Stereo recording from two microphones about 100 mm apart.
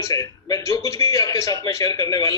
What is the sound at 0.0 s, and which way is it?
A man's voice, 35° left (ahead or behind).